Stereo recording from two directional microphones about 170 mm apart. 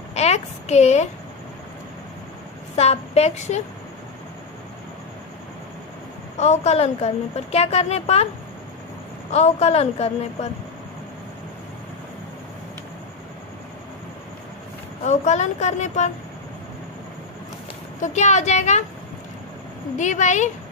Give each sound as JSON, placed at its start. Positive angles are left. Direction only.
{"t": 0.1, "sound": "a woman's voice", "side_deg": 40}
{"t": 2.7, "sound": "a woman's voice", "side_deg": 40}
{"t": 6.3, "sound": "a woman's voice", "side_deg": 40}
{"t": 9.3, "sound": "a woman's voice", "side_deg": 40}
{"t": 15.0, "sound": "a woman's voice", "side_deg": 45}
{"t": 18.0, "sound": "a woman's voice", "side_deg": 45}
{"t": 20.0, "sound": "a woman's voice", "side_deg": 45}